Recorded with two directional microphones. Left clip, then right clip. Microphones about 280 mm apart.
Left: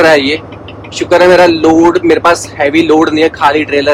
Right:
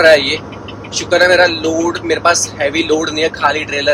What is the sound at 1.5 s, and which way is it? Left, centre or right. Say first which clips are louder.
Speech: left 9 dB; left.